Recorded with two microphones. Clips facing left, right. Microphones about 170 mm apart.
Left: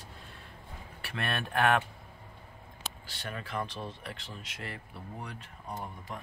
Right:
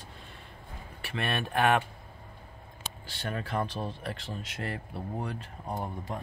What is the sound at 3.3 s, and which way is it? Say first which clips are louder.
Speech: right 4 dB; 35° right (ahead or behind).